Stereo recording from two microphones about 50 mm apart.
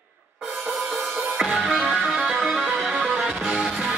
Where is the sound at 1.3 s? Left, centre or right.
Centre.